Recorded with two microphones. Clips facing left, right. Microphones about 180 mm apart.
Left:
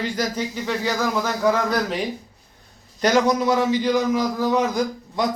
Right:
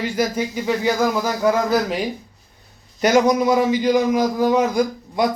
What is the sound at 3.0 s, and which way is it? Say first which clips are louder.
A man's voice: right 3 dB; 10° right (ahead or behind).